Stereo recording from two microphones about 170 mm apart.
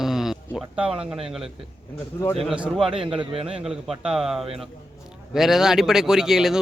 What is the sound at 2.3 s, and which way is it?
Speech, 5° right (ahead or behind).